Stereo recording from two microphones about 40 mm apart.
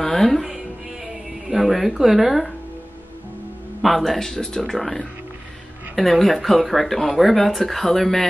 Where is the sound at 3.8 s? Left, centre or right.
Centre.